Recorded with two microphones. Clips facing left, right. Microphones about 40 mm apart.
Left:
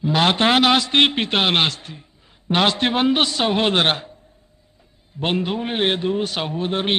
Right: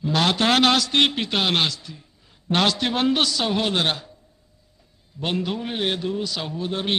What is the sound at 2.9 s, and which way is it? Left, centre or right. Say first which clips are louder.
A man's voice: left 3 dB; left.